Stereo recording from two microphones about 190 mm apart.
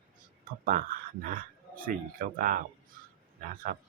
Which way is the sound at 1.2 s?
50° right (ahead or behind).